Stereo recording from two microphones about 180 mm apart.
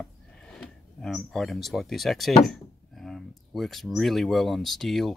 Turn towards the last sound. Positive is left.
turn(degrees=0)  # may be behind; listen again after turning